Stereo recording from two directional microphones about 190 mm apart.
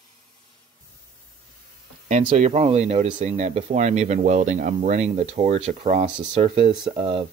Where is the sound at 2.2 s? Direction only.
35° right (ahead or behind).